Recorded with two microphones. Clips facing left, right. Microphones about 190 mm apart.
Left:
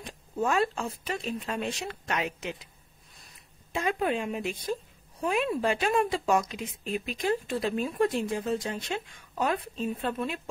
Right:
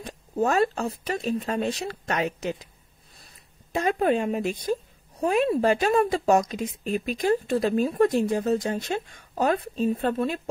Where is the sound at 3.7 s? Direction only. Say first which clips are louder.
Right 5 dB; 40° right (ahead or behind).